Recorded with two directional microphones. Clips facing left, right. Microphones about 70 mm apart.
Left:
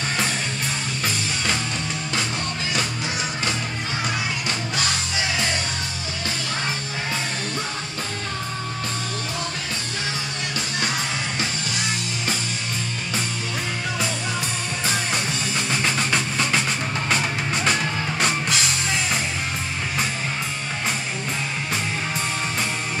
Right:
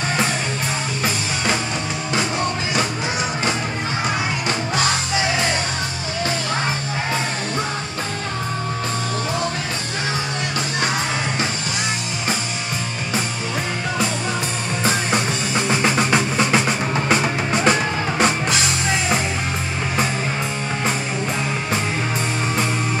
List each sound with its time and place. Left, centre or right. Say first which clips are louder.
1.0 s music: right 3 dB; centre
14.9 s music: right 5 dB; right; by 19.2 s centre